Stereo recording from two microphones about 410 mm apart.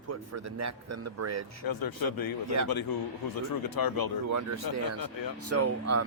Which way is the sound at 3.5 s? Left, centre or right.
Left.